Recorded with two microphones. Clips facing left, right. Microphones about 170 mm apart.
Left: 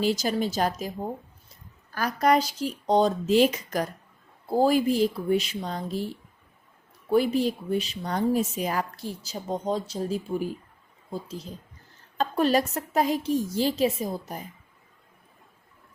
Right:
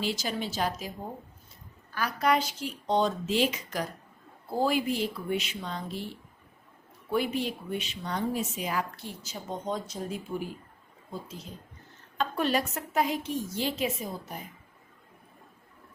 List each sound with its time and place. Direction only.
0.0 s speech: 45° left (ahead or behind)
1.9 s speech: 40° left (ahead or behind)
7.1 s speech: 40° left (ahead or behind)